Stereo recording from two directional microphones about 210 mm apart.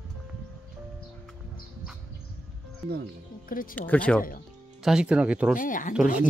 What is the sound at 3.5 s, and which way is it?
Speech, 40° left (ahead or behind).